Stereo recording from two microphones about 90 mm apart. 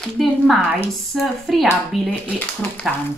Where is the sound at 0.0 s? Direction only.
Centre (ahead or behind).